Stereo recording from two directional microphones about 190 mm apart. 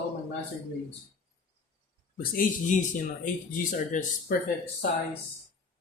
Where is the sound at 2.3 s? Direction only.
45° left (ahead or behind).